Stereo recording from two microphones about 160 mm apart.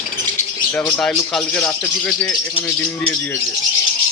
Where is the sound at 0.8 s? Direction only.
5° left (ahead or behind).